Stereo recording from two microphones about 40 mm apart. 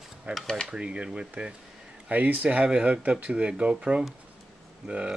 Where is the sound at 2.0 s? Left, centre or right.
Right.